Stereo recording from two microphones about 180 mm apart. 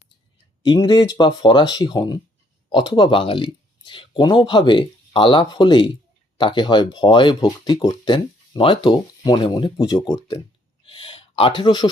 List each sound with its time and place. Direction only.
0.6 s speech: 25° left (ahead or behind)